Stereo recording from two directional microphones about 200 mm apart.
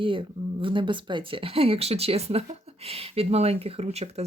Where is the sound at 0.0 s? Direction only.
25° right (ahead or behind).